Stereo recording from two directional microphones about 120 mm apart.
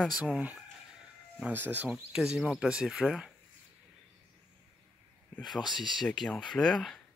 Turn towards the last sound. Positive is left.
turn(degrees=5)  # may be behind; listen again after turning